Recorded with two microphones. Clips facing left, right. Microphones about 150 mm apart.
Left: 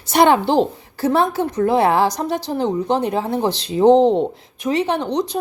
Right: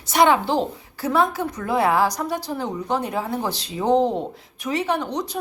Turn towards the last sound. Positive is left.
turn(degrees=20)  # may be behind; listen again after turning